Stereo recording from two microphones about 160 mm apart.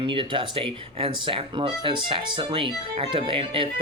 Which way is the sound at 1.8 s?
35° right (ahead or behind).